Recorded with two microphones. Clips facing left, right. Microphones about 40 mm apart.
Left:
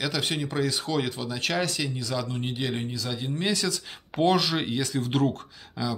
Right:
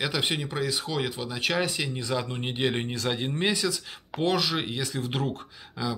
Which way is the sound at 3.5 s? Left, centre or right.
Centre.